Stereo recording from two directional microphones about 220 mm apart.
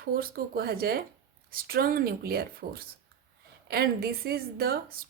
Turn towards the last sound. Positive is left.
turn(degrees=-45)  # may be behind; listen again after turning